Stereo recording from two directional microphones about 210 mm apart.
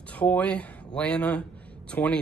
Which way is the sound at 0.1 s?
5° left (ahead or behind).